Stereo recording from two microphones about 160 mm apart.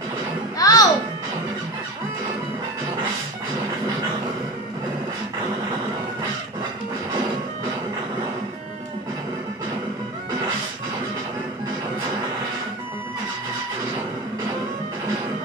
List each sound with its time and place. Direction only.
0.6 s music: 25° left (ahead or behind)